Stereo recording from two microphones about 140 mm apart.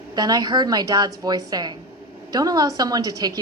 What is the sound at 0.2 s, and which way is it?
A woman's voice, 30° right (ahead or behind).